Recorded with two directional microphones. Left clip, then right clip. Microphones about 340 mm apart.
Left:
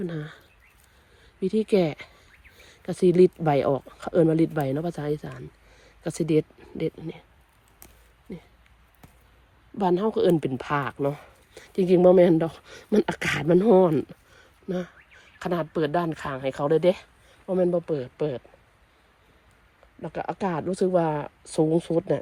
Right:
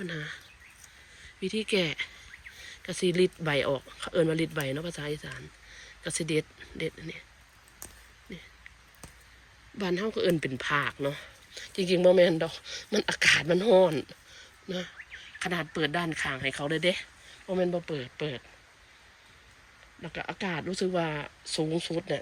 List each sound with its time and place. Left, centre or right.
0.0 s speech: centre
1.4 s speech: centre
3.7 s speech: left
3.9 s speech: centre
10.2 s speech: centre
11.0 s speech: left
11.5 s speech: centre
20.0 s speech: centre